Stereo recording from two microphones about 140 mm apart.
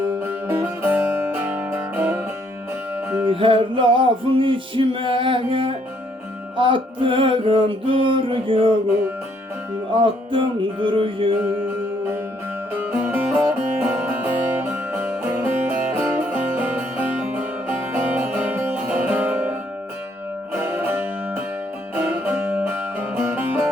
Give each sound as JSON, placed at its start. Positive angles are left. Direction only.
{"t": 0.2, "sound": "music", "side_deg": -15}
{"t": 3.2, "sound": "music", "side_deg": -40}
{"t": 9.9, "sound": "music", "side_deg": -35}
{"t": 12.7, "sound": "music", "side_deg": -15}